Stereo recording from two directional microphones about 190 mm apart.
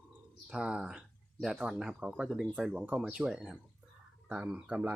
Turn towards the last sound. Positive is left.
turn(degrees=-5)  # may be behind; listen again after turning